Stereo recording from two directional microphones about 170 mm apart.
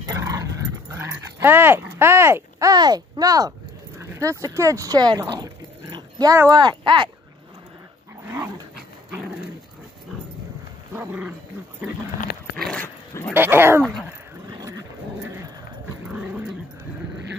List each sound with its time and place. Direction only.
0.0 s dog: 20° right (ahead or behind)
4.0 s speech: 15° right (ahead or behind)
10.9 s roaring cats: 10° right (ahead or behind)
12.5 s dog: centre (ahead or behind)
12.8 s dog: 15° left (ahead or behind)
13.3 s speech: 10° right (ahead or behind)
14.6 s dog: 20° right (ahead or behind)
16.1 s dog: 5° right (ahead or behind)